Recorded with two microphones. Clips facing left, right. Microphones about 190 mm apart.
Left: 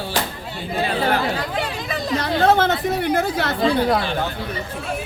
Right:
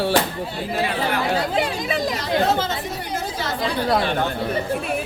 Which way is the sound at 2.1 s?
60° left (ahead or behind).